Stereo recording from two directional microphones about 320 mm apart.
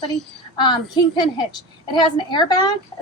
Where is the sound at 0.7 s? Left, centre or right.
Centre.